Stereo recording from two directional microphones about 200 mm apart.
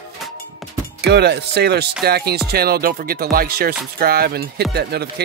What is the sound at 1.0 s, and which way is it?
Speech, 55° right (ahead or behind).